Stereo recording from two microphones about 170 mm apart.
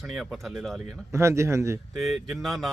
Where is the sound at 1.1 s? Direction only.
15° right (ahead or behind).